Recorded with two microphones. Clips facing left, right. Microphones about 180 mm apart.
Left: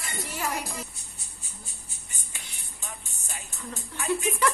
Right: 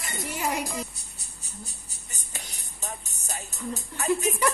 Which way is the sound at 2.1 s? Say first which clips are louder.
Right 5 dB; 40° right (ahead or behind).